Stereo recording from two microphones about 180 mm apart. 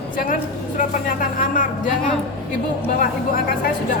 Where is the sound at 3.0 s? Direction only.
55° left (ahead or behind).